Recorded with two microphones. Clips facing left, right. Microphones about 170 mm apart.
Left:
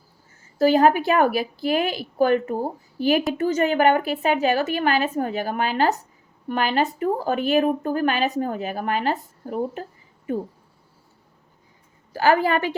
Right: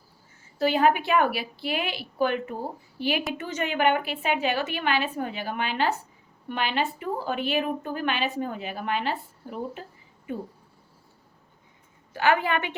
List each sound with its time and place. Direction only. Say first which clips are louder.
0.6 s speech: left 5 dB; 40° left (ahead or behind)
12.1 s speech: left 4 dB; 35° left (ahead or behind)